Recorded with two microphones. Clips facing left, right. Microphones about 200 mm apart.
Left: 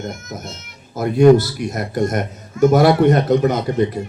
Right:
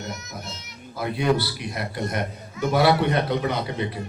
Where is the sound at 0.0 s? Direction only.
50° left (ahead or behind).